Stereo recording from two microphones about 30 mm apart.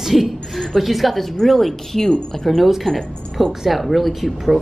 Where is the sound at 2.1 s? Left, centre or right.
Left.